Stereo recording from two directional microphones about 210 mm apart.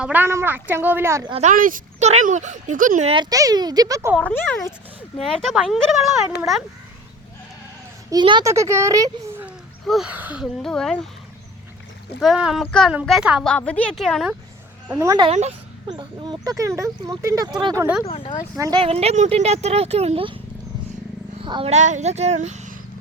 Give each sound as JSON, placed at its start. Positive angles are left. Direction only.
{"t": 0.0, "sound": "a child's voice", "side_deg": -10}
{"t": 1.3, "sound": "speech", "side_deg": -35}
{"t": 4.2, "sound": "a woman's voice", "side_deg": 5}
{"t": 8.1, "sound": "a child's voice", "side_deg": -20}
{"t": 9.8, "sound": "a woman's voice", "side_deg": 0}
{"t": 12.2, "sound": "a woman's voice", "side_deg": 0}
{"t": 14.8, "sound": "a child's voice", "side_deg": -15}
{"t": 18.0, "sound": "speech", "side_deg": 25}
{"t": 18.5, "sound": "a child's voice", "side_deg": -15}
{"t": 18.8, "sound": "speech", "side_deg": -30}